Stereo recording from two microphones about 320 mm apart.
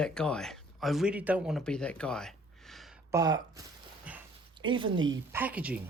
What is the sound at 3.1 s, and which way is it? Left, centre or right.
Speech, centre.